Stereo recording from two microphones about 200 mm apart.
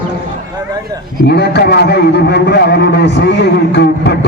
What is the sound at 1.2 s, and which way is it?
A man's voice, 55° left (ahead or behind).